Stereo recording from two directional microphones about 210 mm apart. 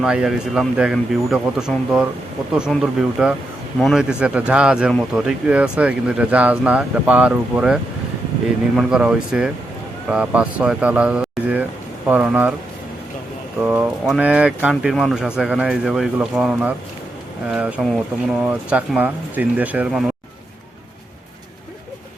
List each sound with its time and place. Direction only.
0.0 s speech: 5° right (ahead or behind)
13.7 s speech: 5° right (ahead or behind)